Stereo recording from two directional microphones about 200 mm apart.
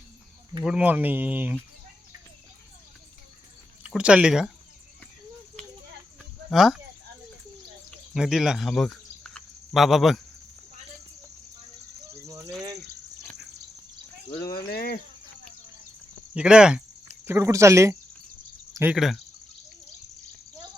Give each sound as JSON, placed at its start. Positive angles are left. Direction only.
{"t": 0.6, "sound": "speech", "side_deg": -5}
{"t": 3.8, "sound": "speech", "side_deg": -5}
{"t": 6.5, "sound": "speech", "side_deg": 0}
{"t": 7.9, "sound": "cricket", "side_deg": 0}
{"t": 12.2, "sound": "a sound", "side_deg": -15}
{"t": 14.7, "sound": "speech", "side_deg": 50}
{"t": 16.3, "sound": "speech", "side_deg": -5}